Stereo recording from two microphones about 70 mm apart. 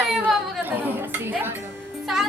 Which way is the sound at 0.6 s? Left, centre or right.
Right.